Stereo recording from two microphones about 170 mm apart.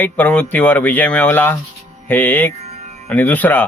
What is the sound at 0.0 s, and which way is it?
Speech, 10° left (ahead or behind).